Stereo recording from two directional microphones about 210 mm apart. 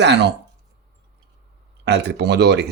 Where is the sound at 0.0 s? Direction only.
55° right (ahead or behind).